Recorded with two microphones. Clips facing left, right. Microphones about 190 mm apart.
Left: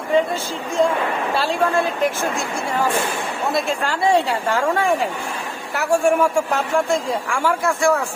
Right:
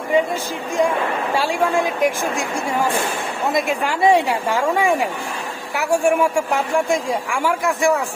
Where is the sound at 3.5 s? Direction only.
15° right (ahead or behind).